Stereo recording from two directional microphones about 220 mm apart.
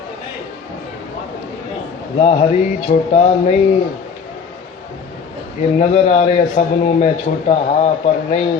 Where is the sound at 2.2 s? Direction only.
25° left (ahead or behind).